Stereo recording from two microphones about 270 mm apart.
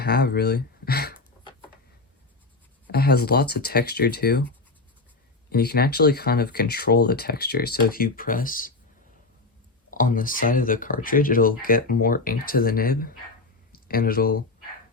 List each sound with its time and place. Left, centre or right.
0.0 s speech: left
2.8 s speech: left
5.5 s speech: left
9.9 s speech: left